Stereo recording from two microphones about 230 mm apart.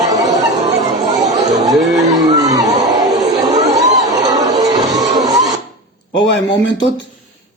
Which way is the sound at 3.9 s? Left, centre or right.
Centre.